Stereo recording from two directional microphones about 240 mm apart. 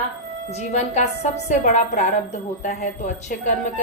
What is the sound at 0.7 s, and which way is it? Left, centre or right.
Speech, left.